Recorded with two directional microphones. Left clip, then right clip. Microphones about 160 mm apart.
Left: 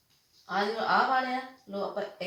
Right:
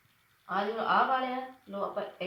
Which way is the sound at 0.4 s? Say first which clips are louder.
Left 1 dB; 10° left (ahead or behind).